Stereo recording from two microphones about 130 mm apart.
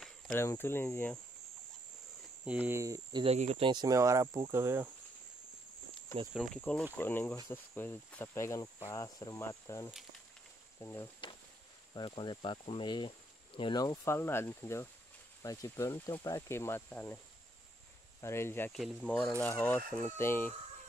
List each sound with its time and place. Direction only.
0.4 s speech: 20° left (ahead or behind)
2.4 s speech: 10° right (ahead or behind)
2.8 s speech: 30° right (ahead or behind)
3.3 s speech: 55° right (ahead or behind)
3.6 s speech: 30° right (ahead or behind)
6.3 s speech: centre (ahead or behind)
6.6 s speech: 10° left (ahead or behind)
11.9 s speech: 40° left (ahead or behind); by 17.2 s 15° left (ahead or behind)
18.2 s speech: 20° left (ahead or behind)
18.7 s speech: centre (ahead or behind)
19.0 s speech: 10° left (ahead or behind)